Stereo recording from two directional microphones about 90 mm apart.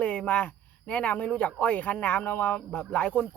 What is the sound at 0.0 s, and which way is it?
Speech, 15° left (ahead or behind).